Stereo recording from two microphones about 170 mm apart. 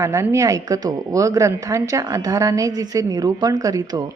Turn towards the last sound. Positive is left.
turn(degrees=-20)  # may be behind; listen again after turning